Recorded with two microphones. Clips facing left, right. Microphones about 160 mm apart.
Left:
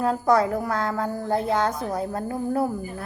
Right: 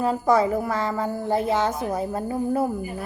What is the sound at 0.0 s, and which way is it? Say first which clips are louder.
A woman's voice: even; 5° right (ahead or behind).